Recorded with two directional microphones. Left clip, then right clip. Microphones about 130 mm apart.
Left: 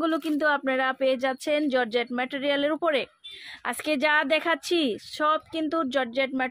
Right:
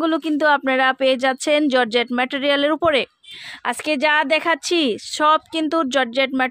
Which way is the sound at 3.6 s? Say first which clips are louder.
Right 6 dB; 40° right (ahead or behind).